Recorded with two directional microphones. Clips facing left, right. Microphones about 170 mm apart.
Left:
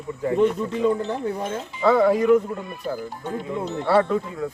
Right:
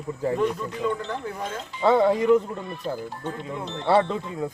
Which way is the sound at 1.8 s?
25° right (ahead or behind).